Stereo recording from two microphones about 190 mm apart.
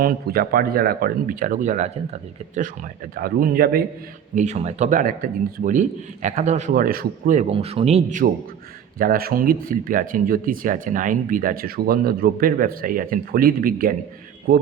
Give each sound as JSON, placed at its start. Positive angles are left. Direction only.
{"t": 0.0, "sound": "speech", "side_deg": -50}
{"t": 3.2, "sound": "speech", "side_deg": -50}
{"t": 4.4, "sound": "speech", "side_deg": -35}
{"t": 9.0, "sound": "speech", "side_deg": -50}